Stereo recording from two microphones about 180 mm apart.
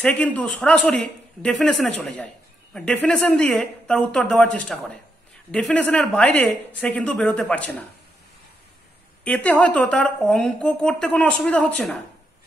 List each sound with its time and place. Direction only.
0.0 s a woman's voice: 10° left (ahead or behind)
9.2 s a woman's voice: 10° left (ahead or behind)